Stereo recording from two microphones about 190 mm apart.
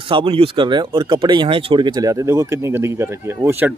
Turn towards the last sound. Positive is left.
turn(degrees=-10)  # may be behind; listen again after turning